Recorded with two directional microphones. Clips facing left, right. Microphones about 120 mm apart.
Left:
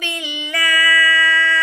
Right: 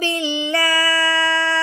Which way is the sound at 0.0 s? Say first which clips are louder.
Right 7 dB; 30° right (ahead or behind).